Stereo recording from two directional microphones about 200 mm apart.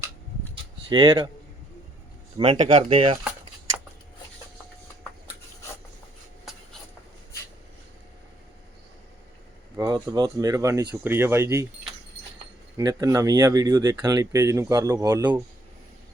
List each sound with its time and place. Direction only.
0.5 s a sound: 25° right (ahead or behind)
2.4 s speech: 25° right (ahead or behind)
9.7 s speech: 20° right (ahead or behind)
12.7 s speech: 20° right (ahead or behind)